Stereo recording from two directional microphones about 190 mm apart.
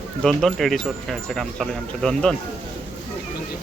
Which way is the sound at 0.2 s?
Centre (ahead or behind).